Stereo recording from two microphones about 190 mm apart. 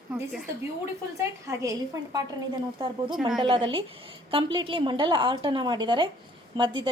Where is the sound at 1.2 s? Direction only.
15° right (ahead or behind).